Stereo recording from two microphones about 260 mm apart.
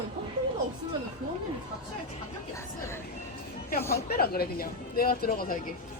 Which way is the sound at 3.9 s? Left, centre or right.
Left.